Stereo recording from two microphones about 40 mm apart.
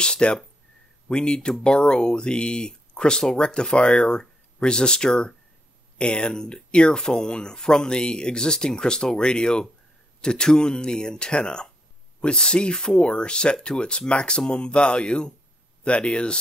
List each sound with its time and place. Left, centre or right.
0.0 s speech: left